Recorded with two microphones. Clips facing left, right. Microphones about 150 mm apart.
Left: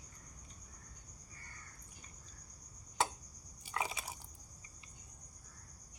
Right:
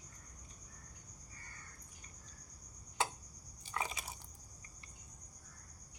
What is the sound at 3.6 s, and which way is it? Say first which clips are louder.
Biting: left 1 dB; 10° left (ahead or behind).